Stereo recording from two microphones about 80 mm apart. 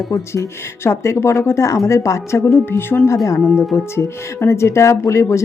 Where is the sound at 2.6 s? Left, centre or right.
Left.